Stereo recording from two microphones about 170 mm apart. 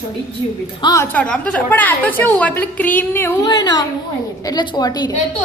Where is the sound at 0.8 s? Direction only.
20° left (ahead or behind).